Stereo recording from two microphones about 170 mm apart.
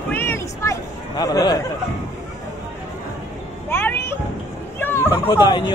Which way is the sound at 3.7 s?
10° left (ahead or behind).